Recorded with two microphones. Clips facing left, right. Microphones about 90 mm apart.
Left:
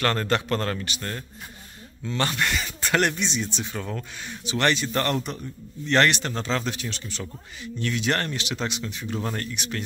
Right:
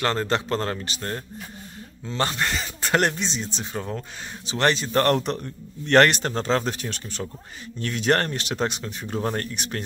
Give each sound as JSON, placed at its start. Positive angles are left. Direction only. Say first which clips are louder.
{"t": 0.0, "sound": "a man's voice", "louder": "even", "side_deg": -20}
{"t": 5.1, "sound": "speech", "louder": "right 5 dB", "side_deg": -65}